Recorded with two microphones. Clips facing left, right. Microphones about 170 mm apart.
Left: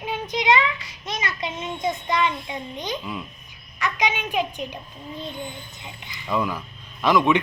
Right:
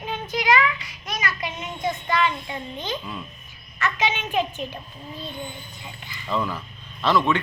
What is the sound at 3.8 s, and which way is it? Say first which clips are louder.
Speech: even; 15° left (ahead or behind).